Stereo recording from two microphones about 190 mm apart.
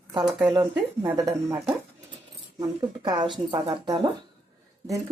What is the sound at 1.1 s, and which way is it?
Speech, 15° right (ahead or behind).